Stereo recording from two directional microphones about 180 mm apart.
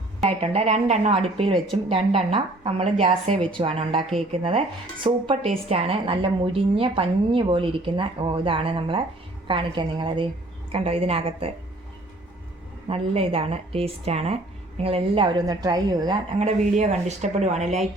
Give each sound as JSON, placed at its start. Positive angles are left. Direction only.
{"t": 0.2, "sound": "a woman's voice", "side_deg": -35}
{"t": 12.9, "sound": "a woman's voice", "side_deg": -30}
{"t": 16.4, "sound": "a woman's voice", "side_deg": -40}